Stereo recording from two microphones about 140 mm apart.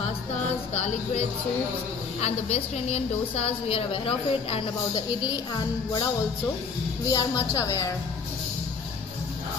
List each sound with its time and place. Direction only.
0.7 s music: 50° left (ahead or behind)
2.2 s a woman's voice: 50° left (ahead or behind); by 6.0 s 30° left (ahead or behind)
7.1 s speech: 25° left (ahead or behind)